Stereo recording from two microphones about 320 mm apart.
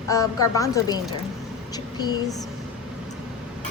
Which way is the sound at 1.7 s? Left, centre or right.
Centre.